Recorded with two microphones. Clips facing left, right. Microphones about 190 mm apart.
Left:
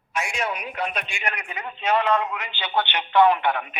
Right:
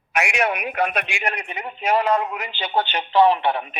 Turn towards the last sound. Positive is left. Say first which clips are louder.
# right 1 dB
turn(degrees=-30)  # may be behind; listen again after turning